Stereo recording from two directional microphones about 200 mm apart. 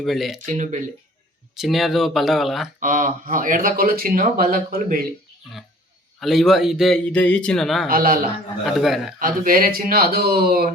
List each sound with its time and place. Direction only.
0.0 s a man's voice: centre (ahead or behind)
0.4 s speech: 35° right (ahead or behind)
1.5 s a man's voice: centre (ahead or behind)
2.8 s speech: 40° right (ahead or behind)
6.1 s a man's voice: centre (ahead or behind)
7.9 s speech: 45° right (ahead or behind)
8.6 s a man's voice: centre (ahead or behind)
9.1 s speech: 45° right (ahead or behind)